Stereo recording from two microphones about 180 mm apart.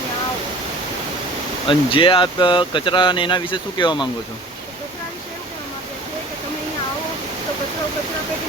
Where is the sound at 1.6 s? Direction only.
30° left (ahead or behind).